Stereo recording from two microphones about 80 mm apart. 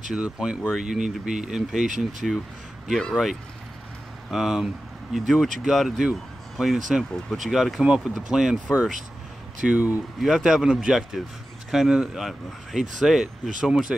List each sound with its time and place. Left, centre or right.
0.1 s speech: centre
2.9 s speech: centre
4.3 s speech: centre
9.7 s speech: centre
10.2 s speech: centre